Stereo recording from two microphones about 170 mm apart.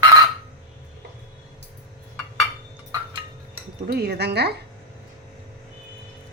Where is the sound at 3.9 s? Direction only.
70° right (ahead or behind).